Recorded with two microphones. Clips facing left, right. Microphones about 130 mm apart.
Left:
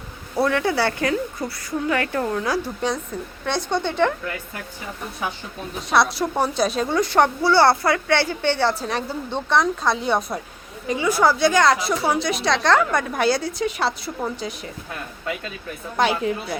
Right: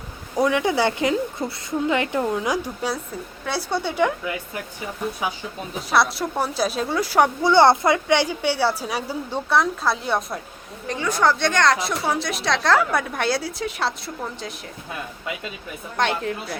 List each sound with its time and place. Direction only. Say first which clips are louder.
0.3 s a woman's voice: even; 15° right (ahead or behind)
5.9 s a woman's voice: left 1 dB; centre (ahead or behind)
7.4 s a woman's voice: right 3 dB; 20° right (ahead or behind); by 14.7 s centre (ahead or behind)
16.0 s a woman's voice: left 3 dB; 5° left (ahead or behind)